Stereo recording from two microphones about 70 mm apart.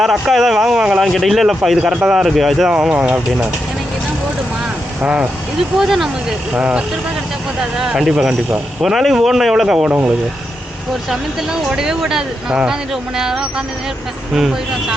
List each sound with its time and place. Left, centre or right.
0.0 s speech: centre
1.8 s speech: centre
2.6 s speech: centre
5.0 s speech: centre
5.8 s speech: centre
6.5 s speech: centre
9.8 s speech: right
11.7 s speech: centre